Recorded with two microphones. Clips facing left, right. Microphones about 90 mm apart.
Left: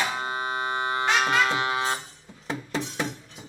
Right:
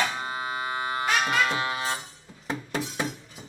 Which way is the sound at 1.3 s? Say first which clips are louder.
Left 2 dB; 25° left (ahead or behind).